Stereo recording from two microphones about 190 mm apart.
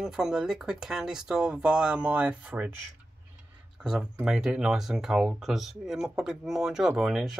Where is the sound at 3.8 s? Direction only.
5° right (ahead or behind).